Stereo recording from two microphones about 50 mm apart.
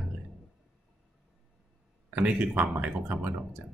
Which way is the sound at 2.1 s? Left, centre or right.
Right.